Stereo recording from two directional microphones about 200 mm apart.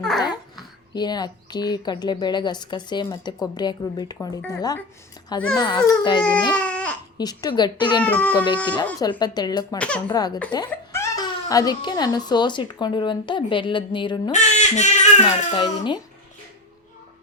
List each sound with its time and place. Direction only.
0.2 s a child's voice: 20° left (ahead or behind)
6.6 s baby cry: 5° left (ahead or behind)
7.2 s a child's voice: 20° left (ahead or behind)
8.0 s a child's voice: 10° left (ahead or behind)
8.6 s a child's voice: 25° left (ahead or behind)
9.7 s speech: 5° left (ahead or behind)
10.1 s a child's voice: 20° left (ahead or behind)
14.3 s speech: 35° left (ahead or behind)
15.5 s a child's voice: 25° left (ahead or behind)